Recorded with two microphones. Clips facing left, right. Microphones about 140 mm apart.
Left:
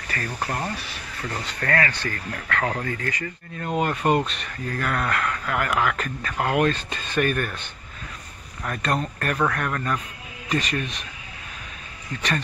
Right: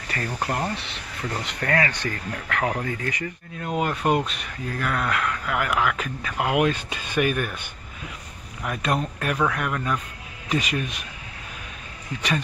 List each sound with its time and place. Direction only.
0.1 s speech: 20° right (ahead or behind)
3.5 s speech: 5° right (ahead or behind)
8.6 s speech: 5° right (ahead or behind)